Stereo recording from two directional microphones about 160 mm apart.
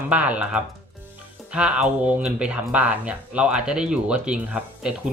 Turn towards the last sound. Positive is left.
turn(degrees=-5)  # may be behind; listen again after turning